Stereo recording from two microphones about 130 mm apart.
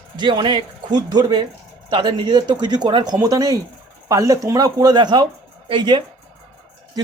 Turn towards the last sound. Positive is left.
turn(degrees=-35)  # may be behind; listen again after turning